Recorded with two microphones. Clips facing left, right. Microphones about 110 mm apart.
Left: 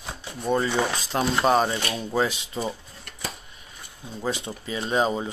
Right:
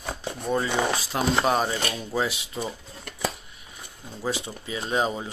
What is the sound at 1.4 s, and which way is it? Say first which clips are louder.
Speech: left 5 dB; centre (ahead or behind).